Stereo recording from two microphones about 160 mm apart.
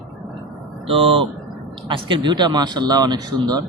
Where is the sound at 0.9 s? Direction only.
35° right (ahead or behind).